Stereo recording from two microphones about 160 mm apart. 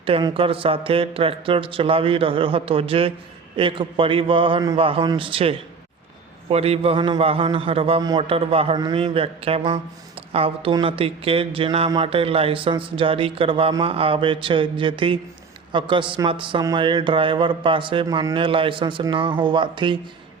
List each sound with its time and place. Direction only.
0.0 s speech: 30° right (ahead or behind)